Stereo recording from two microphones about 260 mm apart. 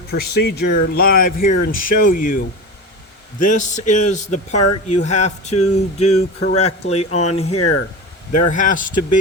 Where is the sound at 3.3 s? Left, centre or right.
Left.